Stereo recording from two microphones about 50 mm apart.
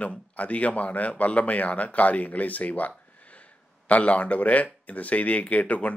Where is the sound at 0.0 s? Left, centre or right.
Left.